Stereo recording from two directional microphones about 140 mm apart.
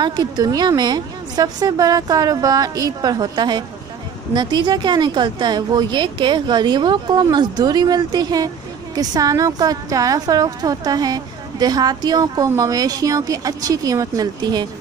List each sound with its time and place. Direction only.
0.0 s a woman's voice: 30° right (ahead or behind)